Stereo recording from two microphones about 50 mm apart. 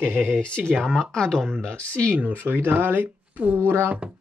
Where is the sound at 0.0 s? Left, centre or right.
Right.